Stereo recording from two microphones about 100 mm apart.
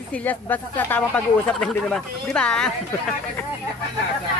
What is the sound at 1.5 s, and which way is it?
Speech, 5° left (ahead or behind).